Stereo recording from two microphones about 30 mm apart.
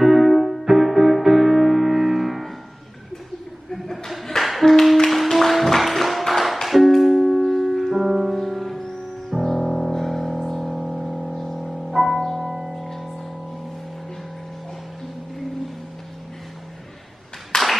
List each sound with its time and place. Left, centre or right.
0.0 s music: centre
3.8 s a sound: centre
4.4 s music: centre
9.8 s music: centre
17.5 s clapping: centre